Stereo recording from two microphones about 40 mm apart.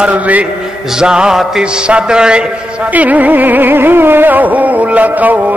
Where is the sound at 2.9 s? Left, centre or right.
Right.